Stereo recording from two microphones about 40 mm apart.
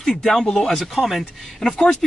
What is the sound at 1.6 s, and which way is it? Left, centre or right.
Speech, left.